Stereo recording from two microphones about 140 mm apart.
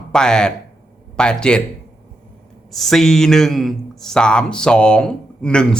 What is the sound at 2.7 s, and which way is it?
A man's voice, centre (ahead or behind).